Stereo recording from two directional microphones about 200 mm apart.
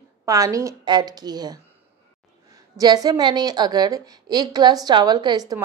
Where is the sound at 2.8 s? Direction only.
20° right (ahead or behind).